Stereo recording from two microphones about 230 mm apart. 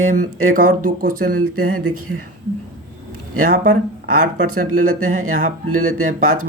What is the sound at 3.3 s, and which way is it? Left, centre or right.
Speech, right.